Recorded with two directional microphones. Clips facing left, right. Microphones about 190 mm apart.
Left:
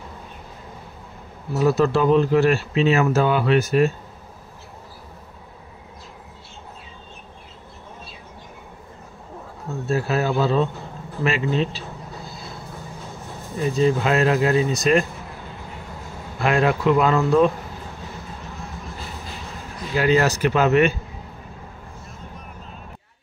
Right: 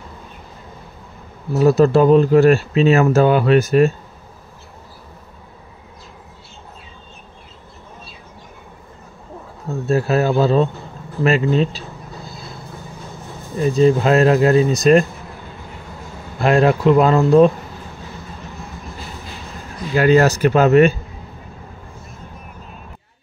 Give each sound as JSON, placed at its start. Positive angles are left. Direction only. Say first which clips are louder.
{"t": 1.6, "sound": "speech", "louder": "right 6 dB", "side_deg": -40}
{"t": 9.8, "sound": "speech", "louder": "right 5 dB", "side_deg": -45}
{"t": 13.7, "sound": "speech", "louder": "right 6 dB", "side_deg": -40}
{"t": 16.3, "sound": "speech", "louder": "right 5 dB", "side_deg": -35}
{"t": 20.0, "sound": "speech", "louder": "right 5 dB", "side_deg": -45}